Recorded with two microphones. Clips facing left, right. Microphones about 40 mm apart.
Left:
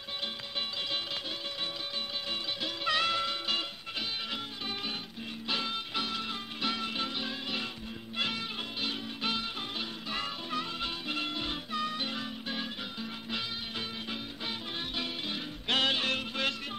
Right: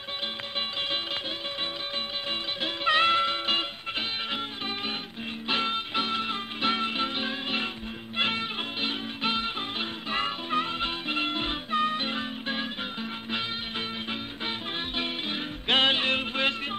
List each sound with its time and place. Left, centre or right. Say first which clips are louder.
2.6 s music: right 7 dB; right
15.0 s music: right 5 dB; right